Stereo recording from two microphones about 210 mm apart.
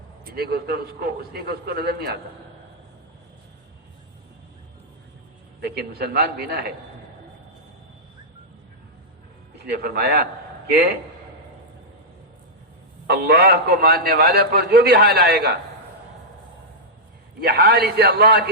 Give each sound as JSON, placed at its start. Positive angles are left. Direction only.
{"t": 0.3, "sound": "a man's voice", "side_deg": -45}
{"t": 5.5, "sound": "a man's voice", "side_deg": -50}
{"t": 9.6, "sound": "a man's voice", "side_deg": -50}
{"t": 13.1, "sound": "a man's voice", "side_deg": -50}
{"t": 17.4, "sound": "a man's voice", "side_deg": -50}